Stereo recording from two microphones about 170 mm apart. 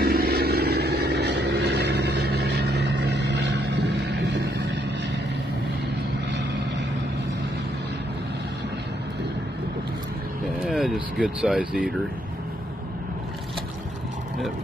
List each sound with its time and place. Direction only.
0.0 s vehicle: 60° right (ahead or behind); by 4.4 s 90° right
10.6 s speech: centre (ahead or behind)